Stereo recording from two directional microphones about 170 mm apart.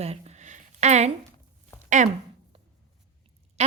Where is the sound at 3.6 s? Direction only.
40° right (ahead or behind).